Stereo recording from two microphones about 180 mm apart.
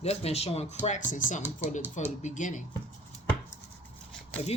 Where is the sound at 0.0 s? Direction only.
35° left (ahead or behind).